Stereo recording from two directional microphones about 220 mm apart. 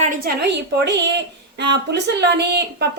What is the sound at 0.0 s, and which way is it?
A woman's voice, 45° right (ahead or behind).